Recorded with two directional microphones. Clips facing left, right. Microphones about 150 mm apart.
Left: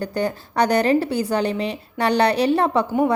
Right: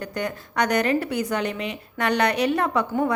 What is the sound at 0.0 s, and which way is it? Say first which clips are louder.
A woman's voice: left 5 dB; 30° left (ahead or behind).